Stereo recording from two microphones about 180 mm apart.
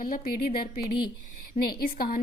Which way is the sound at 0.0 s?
50° left (ahead or behind).